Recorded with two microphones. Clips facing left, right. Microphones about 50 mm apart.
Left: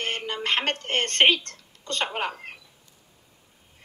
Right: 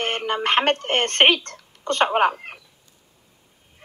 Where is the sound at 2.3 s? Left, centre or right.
Right.